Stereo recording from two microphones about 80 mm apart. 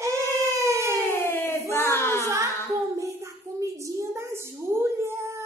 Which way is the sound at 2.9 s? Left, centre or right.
Right.